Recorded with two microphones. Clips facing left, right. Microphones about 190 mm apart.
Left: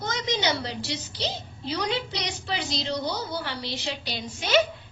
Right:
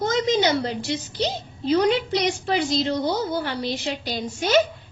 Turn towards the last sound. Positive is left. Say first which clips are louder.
# right 4 dB
turn(degrees=-45)  # may be behind; listen again after turning